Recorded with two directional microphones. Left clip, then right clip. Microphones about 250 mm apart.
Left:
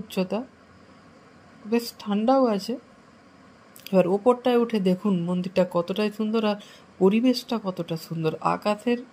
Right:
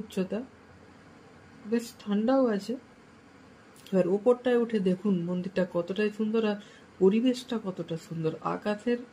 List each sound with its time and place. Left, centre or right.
0.1 s speech: left
1.7 s speech: left
3.8 s speech: left